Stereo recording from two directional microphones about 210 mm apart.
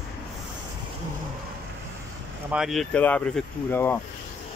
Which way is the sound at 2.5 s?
Centre (ahead or behind).